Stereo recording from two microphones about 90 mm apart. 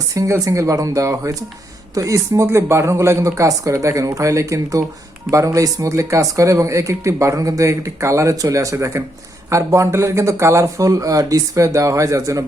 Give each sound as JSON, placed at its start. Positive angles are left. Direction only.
{"t": 0.1, "sound": "speech", "side_deg": -35}